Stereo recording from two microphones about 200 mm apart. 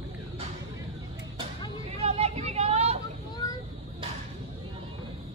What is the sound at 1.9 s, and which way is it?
Vehicle, 30° right (ahead or behind).